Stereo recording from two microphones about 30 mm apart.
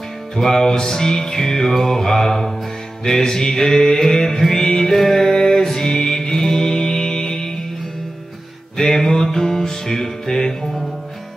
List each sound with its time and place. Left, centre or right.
0.4 s music: centre
1.7 s mantra: centre
2.0 s music: centre
8.7 s music: centre